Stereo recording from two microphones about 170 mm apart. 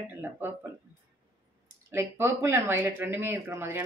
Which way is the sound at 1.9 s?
15° right (ahead or behind).